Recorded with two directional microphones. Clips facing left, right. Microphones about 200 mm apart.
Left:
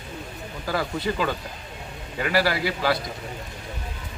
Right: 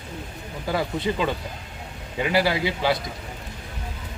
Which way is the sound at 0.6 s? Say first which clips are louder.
Right 1 dB; 20° right (ahead or behind).